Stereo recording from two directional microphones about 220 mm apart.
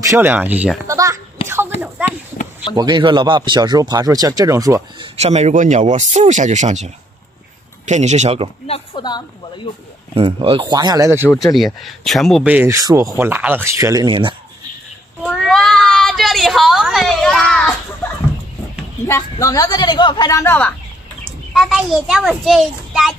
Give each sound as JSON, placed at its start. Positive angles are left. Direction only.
{"t": 0.1, "sound": "speech", "side_deg": -10}
{"t": 2.7, "sound": "speech", "side_deg": -20}
{"t": 8.6, "sound": "a woman's voice", "side_deg": 25}
{"t": 10.1, "sound": "speech", "side_deg": -25}
{"t": 11.2, "sound": "speech", "side_deg": 0}
{"t": 15.2, "sound": "a sound", "side_deg": 0}
{"t": 19.0, "sound": "a child's voice", "side_deg": 15}